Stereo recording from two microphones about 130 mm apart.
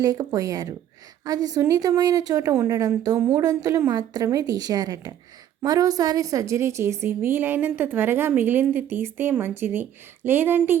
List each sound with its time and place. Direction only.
0.0 s a woman's voice: 30° right (ahead or behind)